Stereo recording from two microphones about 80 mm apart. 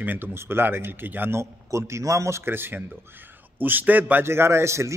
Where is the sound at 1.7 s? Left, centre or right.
Right.